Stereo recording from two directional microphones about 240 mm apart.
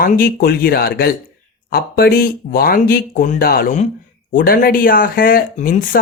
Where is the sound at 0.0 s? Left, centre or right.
Left.